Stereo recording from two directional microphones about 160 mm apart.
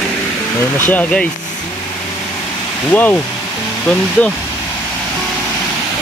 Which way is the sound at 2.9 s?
10° left (ahead or behind).